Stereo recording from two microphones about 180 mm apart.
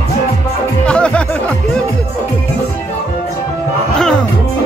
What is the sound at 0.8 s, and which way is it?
Music, 5° left (ahead or behind).